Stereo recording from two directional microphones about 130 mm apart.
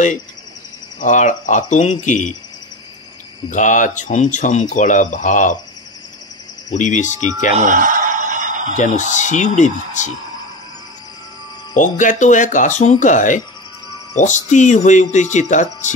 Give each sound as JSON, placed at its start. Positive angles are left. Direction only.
{"t": 1.0, "sound": "speech", "side_deg": 70}
{"t": 3.4, "sound": "speech", "side_deg": 75}
{"t": 6.7, "sound": "speech", "side_deg": 70}
{"t": 7.6, "sound": "a sound", "side_deg": -90}
{"t": 8.7, "sound": "speech", "side_deg": 70}
{"t": 11.7, "sound": "speech", "side_deg": 80}